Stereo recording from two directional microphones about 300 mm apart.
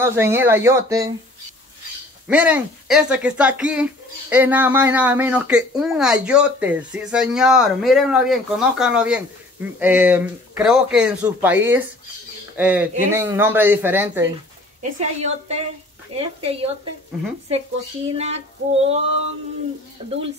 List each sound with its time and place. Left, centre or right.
0.0 s speech: centre
2.2 s speech: centre
14.8 s a woman's voice: right
18.1 s a woman's voice: right